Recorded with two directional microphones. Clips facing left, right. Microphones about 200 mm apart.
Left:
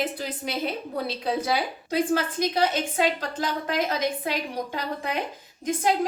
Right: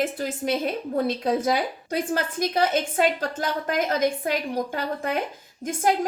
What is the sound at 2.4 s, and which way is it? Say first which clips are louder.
A woman's voice: right 1 dB; 50° right (ahead or behind).